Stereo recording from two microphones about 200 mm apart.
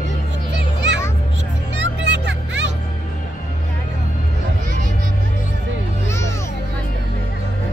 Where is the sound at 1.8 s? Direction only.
60° right (ahead or behind).